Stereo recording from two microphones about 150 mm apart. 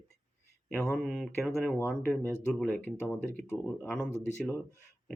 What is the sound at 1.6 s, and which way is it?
Speech, 10° left (ahead or behind).